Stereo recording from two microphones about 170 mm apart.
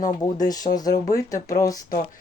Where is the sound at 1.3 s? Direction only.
50° left (ahead or behind).